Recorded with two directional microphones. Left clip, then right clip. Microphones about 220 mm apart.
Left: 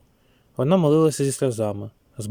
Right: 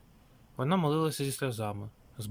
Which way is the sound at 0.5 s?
25° left (ahead or behind).